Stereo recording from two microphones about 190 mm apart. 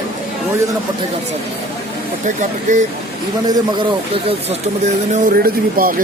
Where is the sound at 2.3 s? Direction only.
40° right (ahead or behind).